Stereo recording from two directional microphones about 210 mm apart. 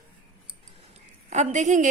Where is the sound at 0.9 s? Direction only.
35° right (ahead or behind).